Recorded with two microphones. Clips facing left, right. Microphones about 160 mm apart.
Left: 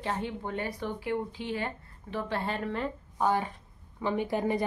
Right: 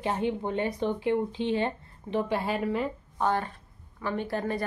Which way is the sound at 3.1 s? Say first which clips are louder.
Even; 10° left (ahead or behind).